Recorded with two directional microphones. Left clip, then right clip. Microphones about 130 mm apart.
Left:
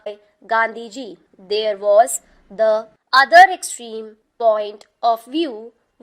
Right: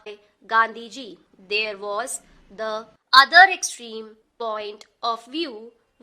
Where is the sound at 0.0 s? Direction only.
35° left (ahead or behind).